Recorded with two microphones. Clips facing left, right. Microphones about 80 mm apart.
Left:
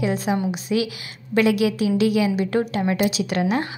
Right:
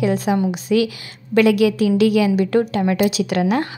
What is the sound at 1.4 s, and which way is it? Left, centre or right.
Speech, right.